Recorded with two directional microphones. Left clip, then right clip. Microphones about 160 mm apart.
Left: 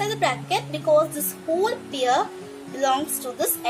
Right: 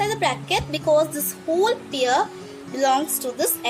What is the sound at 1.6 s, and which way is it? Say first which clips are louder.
A woman's voice: right 4 dB; 20° right (ahead or behind).